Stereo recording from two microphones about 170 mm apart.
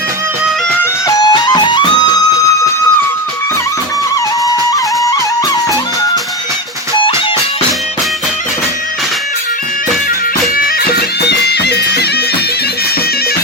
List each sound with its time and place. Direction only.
1.0 s music: 25° left (ahead or behind)
4.9 s music: 20° left (ahead or behind)
11.3 s music: 80° left